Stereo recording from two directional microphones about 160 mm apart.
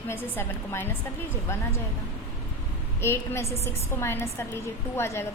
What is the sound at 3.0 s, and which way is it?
A woman's voice, 15° left (ahead or behind).